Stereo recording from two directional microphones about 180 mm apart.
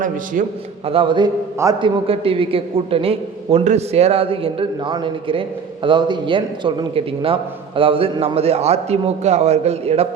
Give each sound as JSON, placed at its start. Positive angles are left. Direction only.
{"t": 0.4, "sound": "a man's voice", "side_deg": -50}
{"t": 0.9, "sound": "a man's voice", "side_deg": -30}